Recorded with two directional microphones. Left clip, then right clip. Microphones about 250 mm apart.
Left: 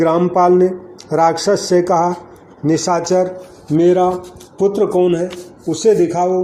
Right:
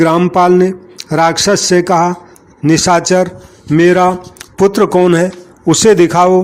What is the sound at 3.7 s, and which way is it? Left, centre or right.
Speech, right.